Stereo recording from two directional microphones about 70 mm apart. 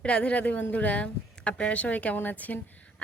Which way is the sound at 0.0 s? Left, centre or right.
Centre.